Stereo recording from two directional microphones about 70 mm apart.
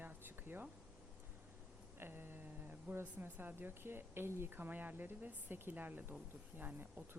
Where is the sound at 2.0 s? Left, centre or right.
Right.